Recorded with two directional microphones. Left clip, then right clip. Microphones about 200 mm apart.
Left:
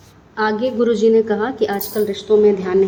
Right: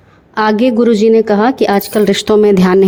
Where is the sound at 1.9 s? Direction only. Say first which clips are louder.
Right 3 dB; 50° right (ahead or behind).